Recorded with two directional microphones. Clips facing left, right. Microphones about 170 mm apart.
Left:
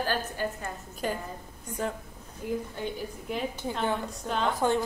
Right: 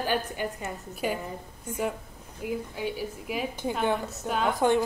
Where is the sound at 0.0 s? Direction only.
15° right (ahead or behind).